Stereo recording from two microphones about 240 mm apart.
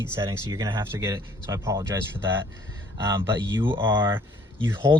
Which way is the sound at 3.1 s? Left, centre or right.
Centre.